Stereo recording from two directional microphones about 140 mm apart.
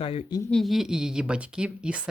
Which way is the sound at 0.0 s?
40° left (ahead or behind).